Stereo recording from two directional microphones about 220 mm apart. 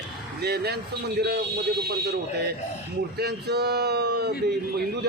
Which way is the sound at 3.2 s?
50° right (ahead or behind).